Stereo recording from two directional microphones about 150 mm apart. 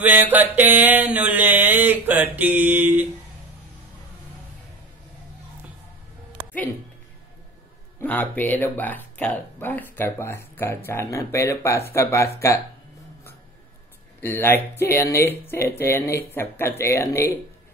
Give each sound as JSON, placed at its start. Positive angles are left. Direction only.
{"t": 0.0, "sound": "mantra", "side_deg": -10}
{"t": 8.0, "sound": "speech", "side_deg": 10}
{"t": 14.2, "sound": "speech", "side_deg": 15}